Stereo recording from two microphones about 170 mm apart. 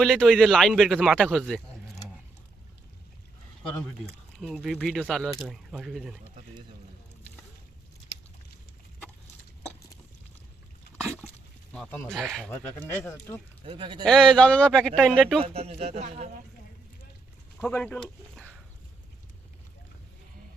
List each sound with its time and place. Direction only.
0.0 s speech: 5° left (ahead or behind)
4.4 s speech: centre (ahead or behind)
11.7 s speech: 5° left (ahead or behind)
12.5 s speech: 10° left (ahead or behind)
13.7 s speech: 30° right (ahead or behind)
14.0 s speech: 5° left (ahead or behind)
15.4 s a man's voice: 35° right (ahead or behind)
17.6 s speech: 10° left (ahead or behind)